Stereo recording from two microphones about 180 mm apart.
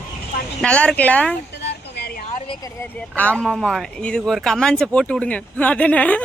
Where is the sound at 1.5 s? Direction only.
70° left (ahead or behind).